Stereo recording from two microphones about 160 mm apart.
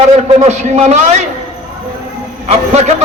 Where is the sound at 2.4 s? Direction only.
40° right (ahead or behind).